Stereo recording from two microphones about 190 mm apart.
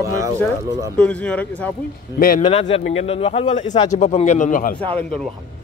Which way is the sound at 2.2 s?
50° left (ahead or behind).